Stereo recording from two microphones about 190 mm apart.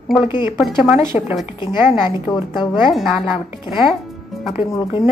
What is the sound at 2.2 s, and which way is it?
Speech, 25° left (ahead or behind).